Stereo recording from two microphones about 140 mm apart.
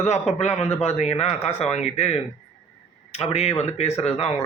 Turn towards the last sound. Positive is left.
turn(degrees=50)  # may be behind; listen again after turning